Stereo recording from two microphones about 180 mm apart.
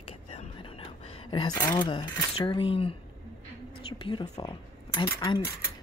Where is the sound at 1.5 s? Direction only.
25° left (ahead or behind).